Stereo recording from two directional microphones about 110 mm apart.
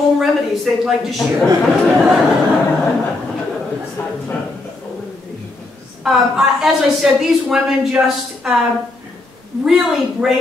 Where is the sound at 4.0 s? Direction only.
25° left (ahead or behind).